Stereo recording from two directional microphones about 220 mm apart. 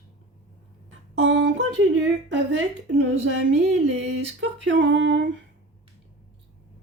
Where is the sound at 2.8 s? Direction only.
55° right (ahead or behind).